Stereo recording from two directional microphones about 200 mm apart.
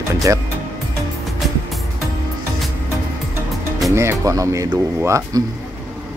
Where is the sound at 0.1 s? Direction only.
15° right (ahead or behind).